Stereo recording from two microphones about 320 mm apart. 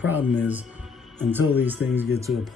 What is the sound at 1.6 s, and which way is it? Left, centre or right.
Speech, centre.